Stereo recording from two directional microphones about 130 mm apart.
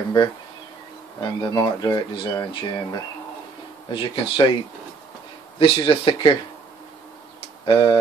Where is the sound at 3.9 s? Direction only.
40° left (ahead or behind).